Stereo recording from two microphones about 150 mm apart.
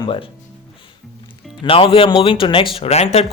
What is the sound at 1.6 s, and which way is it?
Speech, 40° left (ahead or behind).